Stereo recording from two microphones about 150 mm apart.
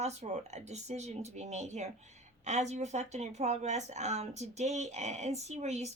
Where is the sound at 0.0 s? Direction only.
50° right (ahead or behind).